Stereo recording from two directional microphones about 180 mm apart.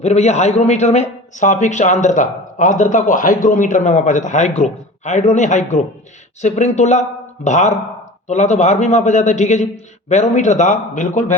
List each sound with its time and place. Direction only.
0.0 s a man's voice: 40° left (ahead or behind)